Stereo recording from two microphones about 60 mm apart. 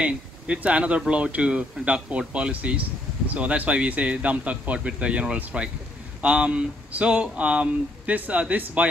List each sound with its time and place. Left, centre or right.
0.0 s speech: right